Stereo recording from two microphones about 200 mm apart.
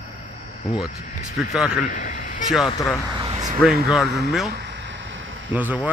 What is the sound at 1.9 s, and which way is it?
Speech, 40° left (ahead or behind).